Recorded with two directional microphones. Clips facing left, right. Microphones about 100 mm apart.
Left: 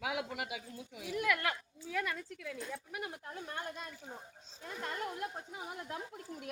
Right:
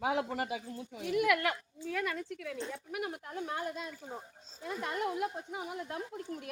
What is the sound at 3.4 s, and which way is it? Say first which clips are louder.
Speech: right 6 dB; 90° right.